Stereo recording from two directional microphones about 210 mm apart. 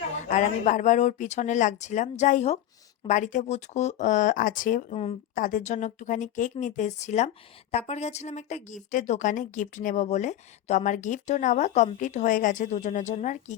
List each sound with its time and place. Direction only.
0.2 s speech: 35° left (ahead or behind)